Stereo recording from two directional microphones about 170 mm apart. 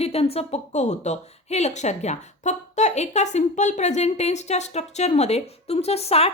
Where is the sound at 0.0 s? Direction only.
35° left (ahead or behind).